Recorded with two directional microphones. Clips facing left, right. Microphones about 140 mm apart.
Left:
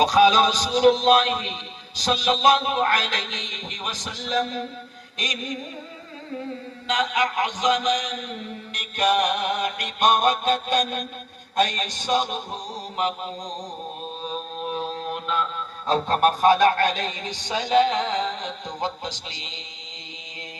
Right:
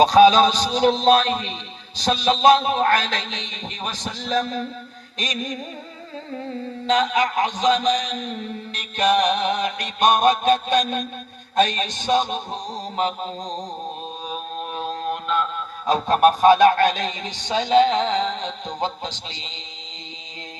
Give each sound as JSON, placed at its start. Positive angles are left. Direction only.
{"t": 0.0, "sound": "a man's voice", "side_deg": -30}
{"t": 6.8, "sound": "a man's voice", "side_deg": -30}
{"t": 14.6, "sound": "mantra", "side_deg": 0}
{"t": 15.9, "sound": "speech", "side_deg": -15}